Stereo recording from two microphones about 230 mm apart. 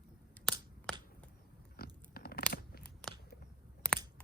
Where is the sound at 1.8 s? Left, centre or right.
Left.